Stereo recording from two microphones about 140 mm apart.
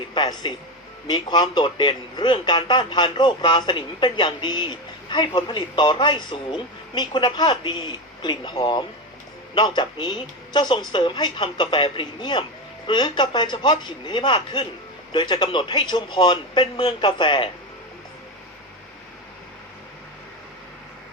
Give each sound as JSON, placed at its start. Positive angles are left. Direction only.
{"t": 0.1, "sound": "a man's voice", "side_deg": 30}